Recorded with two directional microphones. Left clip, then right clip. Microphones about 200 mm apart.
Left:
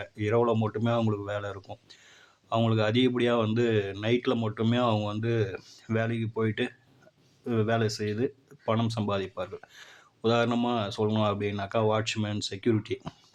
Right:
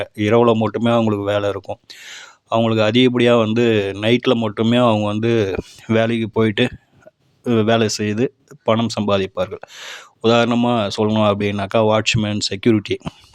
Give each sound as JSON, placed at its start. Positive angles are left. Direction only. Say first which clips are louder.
{"t": 0.0, "sound": "speech", "louder": "right 12 dB", "side_deg": -45}